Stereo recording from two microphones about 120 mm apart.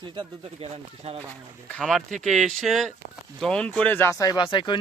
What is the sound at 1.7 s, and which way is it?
Speech, 5° left (ahead or behind).